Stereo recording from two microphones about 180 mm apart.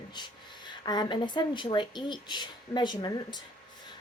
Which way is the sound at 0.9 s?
25° left (ahead or behind).